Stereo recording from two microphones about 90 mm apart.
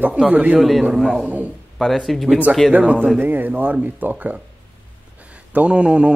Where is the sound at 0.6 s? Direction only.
Centre (ahead or behind).